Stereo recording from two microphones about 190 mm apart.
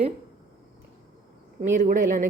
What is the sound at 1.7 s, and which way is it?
Speech, 45° right (ahead or behind).